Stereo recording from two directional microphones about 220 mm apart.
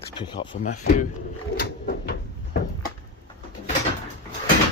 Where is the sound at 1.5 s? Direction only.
45° left (ahead or behind).